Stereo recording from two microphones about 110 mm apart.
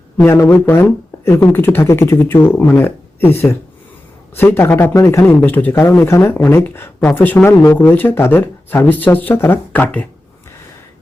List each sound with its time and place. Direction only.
0.7 s speech: 20° left (ahead or behind)